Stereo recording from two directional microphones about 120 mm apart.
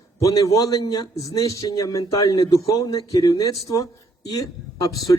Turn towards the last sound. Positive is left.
turn(degrees=30)  # may be behind; listen again after turning